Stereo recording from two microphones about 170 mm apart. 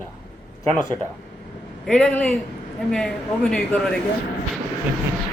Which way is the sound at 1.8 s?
5° left (ahead or behind).